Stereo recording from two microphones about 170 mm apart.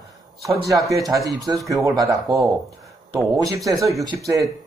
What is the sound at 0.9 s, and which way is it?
A man's voice, 20° right (ahead or behind).